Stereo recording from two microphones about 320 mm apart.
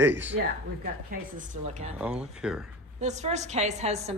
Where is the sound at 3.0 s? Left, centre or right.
Right.